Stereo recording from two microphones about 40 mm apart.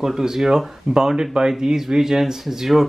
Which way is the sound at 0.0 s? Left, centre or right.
Centre.